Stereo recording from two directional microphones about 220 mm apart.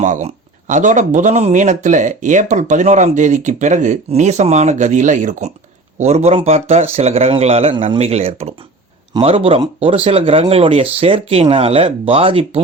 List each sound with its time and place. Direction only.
0.0 s speech: 35° right (ahead or behind)